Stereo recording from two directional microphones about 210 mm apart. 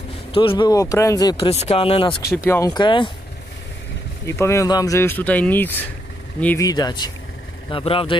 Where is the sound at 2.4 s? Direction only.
15° left (ahead or behind).